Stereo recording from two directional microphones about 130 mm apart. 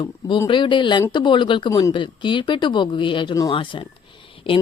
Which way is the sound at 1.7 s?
25° left (ahead or behind).